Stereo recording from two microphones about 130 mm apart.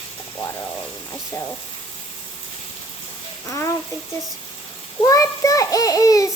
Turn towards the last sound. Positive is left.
turn(degrees=25)  # may be behind; listen again after turning